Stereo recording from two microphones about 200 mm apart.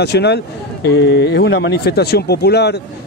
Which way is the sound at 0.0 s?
55° left (ahead or behind).